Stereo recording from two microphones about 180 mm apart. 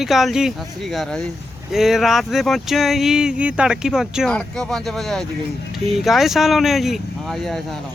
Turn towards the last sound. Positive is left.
turn(degrees=0)  # may be behind; listen again after turning